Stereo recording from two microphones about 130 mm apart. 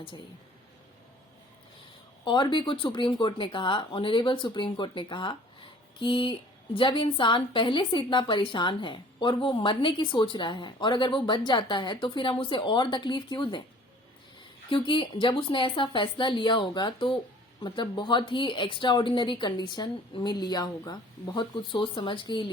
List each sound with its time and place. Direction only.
2.2 s a woman's voice: 35° left (ahead or behind)
14.7 s a woman's voice: 40° left (ahead or behind)